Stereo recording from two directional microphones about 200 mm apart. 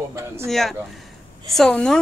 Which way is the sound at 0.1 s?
10° right (ahead or behind).